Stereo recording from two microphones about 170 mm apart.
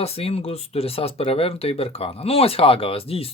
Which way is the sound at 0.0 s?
35° left (ahead or behind).